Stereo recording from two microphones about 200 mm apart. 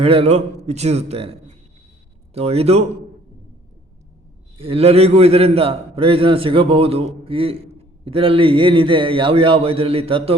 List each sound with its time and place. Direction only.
0.0 s a man's voice: 30° right (ahead or behind)
4.5 s a man's voice: 30° right (ahead or behind)